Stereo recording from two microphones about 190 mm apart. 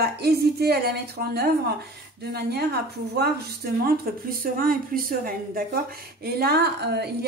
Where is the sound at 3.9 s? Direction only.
50° right (ahead or behind).